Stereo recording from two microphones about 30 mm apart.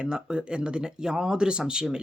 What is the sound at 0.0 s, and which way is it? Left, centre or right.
Speech, right.